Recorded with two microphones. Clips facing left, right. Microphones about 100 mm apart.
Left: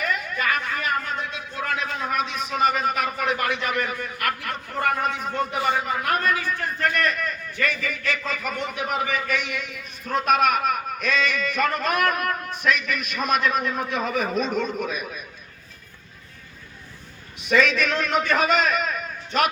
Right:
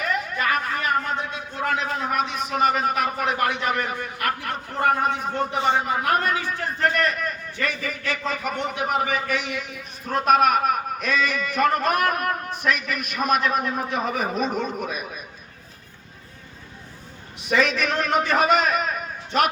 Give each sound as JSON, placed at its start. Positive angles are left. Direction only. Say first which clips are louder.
{"t": 0.5, "sound": "a sound", "louder": "right 4 dB", "side_deg": -40}
{"t": 1.6, "sound": "a man's voice", "louder": "right 3 dB", "side_deg": -25}
{"t": 2.0, "sound": "a man's voice", "louder": "right 1 dB", "side_deg": -45}
{"t": 17.5, "sound": "a man's voice", "louder": "left 1 dB", "side_deg": -40}